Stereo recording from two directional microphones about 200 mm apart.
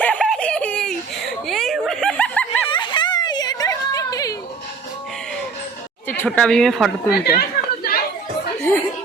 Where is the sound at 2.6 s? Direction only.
25° left (ahead or behind).